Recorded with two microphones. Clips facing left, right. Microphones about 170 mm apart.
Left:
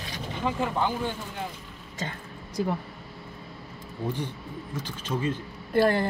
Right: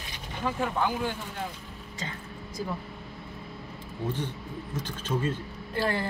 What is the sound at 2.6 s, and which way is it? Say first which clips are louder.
Speech: left 6 dB; 70° left (ahead or behind).